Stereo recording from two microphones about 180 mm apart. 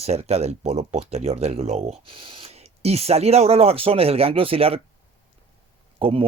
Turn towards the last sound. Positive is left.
turn(degrees=-30)  # may be behind; listen again after turning